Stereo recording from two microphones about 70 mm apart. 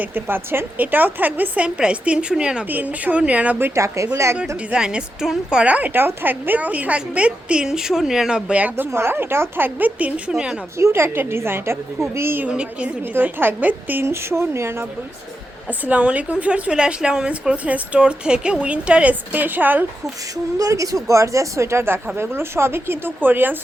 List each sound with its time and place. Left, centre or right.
0.0 s a woman's voice: right; by 2.6 s centre
2.6 s a woman's voice: right
3.8 s speech: right
4.7 s a woman's voice: centre
8.7 s a woman's voice: right; by 10.3 s centre
10.3 s a woman's voice: centre
10.8 s a woman's voice: right
12.5 s a woman's voice: centre
13.0 s a woman's voice: right
14.1 s a woman's voice: right
15.9 s a woman's voice: centre
20.3 s a woman's voice: right